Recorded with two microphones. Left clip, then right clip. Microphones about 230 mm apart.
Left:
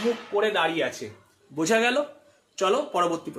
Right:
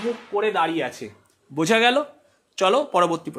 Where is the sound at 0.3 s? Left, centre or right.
Right.